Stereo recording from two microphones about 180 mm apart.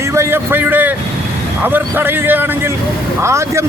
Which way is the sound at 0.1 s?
15° right (ahead or behind).